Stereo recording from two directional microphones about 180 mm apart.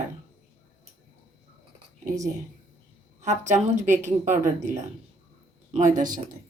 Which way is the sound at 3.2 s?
40° right (ahead or behind).